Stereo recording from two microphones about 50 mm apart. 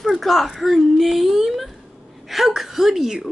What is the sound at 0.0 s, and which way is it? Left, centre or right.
A child's voice, centre.